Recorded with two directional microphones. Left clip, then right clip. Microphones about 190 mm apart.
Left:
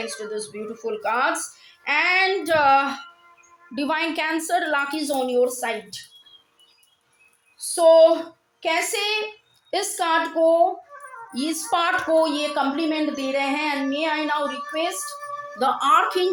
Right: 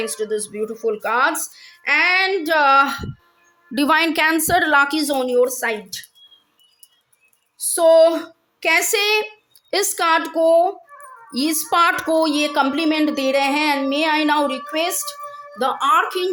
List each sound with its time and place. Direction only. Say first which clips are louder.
0.0 s speech: right 6 dB; 40° right (ahead or behind)
3.8 s a woman's voice: right 7 dB; 50° right (ahead or behind)
7.8 s a woman's voice: right 1 dB; 45° right (ahead or behind); by 15.1 s 65° right (ahead or behind)
15.5 s speech: right 2 dB; 30° right (ahead or behind)